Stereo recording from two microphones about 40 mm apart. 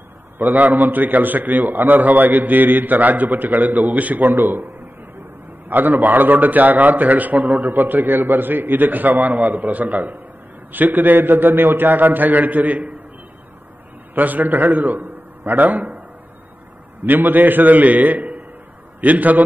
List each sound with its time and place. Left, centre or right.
0.4 s a man's voice: right
5.7 s a man's voice: right
14.1 s a man's voice: right
17.0 s a man's voice: right